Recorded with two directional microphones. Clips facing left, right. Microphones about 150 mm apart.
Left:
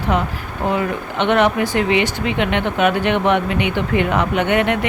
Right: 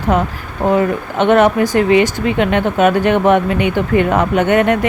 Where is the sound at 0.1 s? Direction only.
45° right (ahead or behind).